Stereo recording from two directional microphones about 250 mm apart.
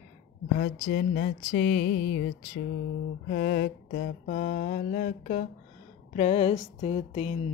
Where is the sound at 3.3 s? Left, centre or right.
Left.